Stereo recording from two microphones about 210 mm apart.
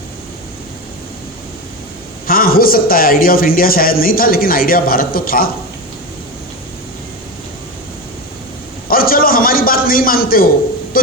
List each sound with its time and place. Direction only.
2.2 s a man's voice: 45° left (ahead or behind)
8.9 s a sound: 45° left (ahead or behind)
10.9 s a man's voice: 45° left (ahead or behind)